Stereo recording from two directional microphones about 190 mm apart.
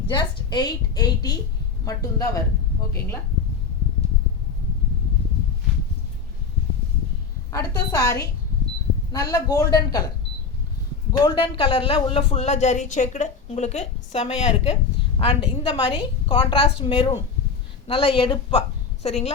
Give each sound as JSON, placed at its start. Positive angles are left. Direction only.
{"t": 0.1, "sound": "a woman's voice", "side_deg": 25}
{"t": 7.5, "sound": "a woman's voice", "side_deg": 15}
{"t": 9.3, "sound": "a woman's voice", "side_deg": 20}
{"t": 11.2, "sound": "a woman's voice", "side_deg": 25}